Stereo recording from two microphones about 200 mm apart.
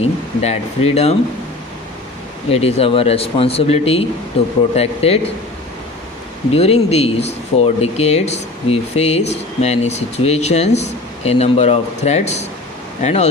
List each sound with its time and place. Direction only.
0.0 s speech: 30° left (ahead or behind)
2.5 s speech: 30° left (ahead or behind)
6.5 s speech: 30° left (ahead or behind)